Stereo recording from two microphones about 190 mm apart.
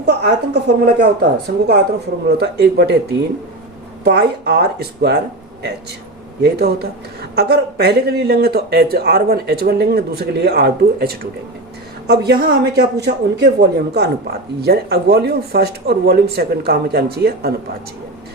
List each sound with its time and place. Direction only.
0.0 s speech: 65° right (ahead or behind)
4.0 s speech: 60° right (ahead or behind)
6.4 s speech: 60° right (ahead or behind)